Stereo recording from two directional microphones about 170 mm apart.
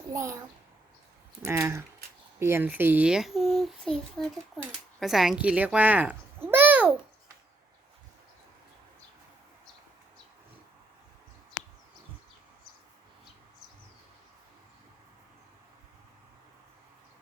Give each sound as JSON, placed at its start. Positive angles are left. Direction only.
{"t": 0.1, "sound": "a child's voice", "side_deg": -15}
{"t": 1.4, "sound": "a child's voice", "side_deg": -15}